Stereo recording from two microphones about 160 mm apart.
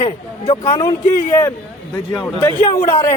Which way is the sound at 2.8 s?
50° left (ahead or behind).